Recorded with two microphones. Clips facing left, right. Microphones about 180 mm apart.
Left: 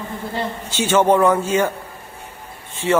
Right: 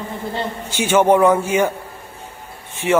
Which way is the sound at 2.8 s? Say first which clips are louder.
Right 1 dB; 15° right (ahead or behind).